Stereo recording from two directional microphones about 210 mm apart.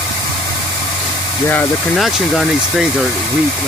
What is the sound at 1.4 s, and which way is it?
Speech, 5° left (ahead or behind).